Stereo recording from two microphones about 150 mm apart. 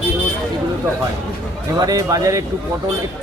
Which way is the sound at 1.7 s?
25° right (ahead or behind).